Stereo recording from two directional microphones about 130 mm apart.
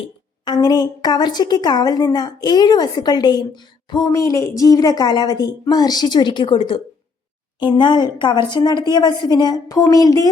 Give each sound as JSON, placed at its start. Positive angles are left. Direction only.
{"t": 0.4, "sound": "a woman's voice", "side_deg": 30}
{"t": 4.1, "sound": "a woman's voice", "side_deg": 25}